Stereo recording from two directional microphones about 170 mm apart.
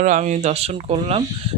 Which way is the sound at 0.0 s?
45° right (ahead or behind).